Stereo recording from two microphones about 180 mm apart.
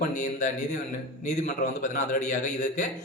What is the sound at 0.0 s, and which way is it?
A man's voice, 40° left (ahead or behind).